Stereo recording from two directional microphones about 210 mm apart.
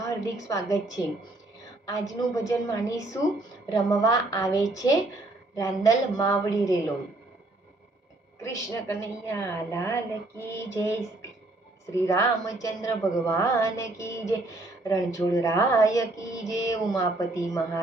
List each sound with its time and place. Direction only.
0.4 s speech: 15° left (ahead or behind)
8.4 s speech: 15° left (ahead or behind)